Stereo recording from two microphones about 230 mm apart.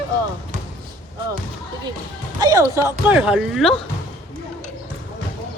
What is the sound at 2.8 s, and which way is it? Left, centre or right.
Speech, centre.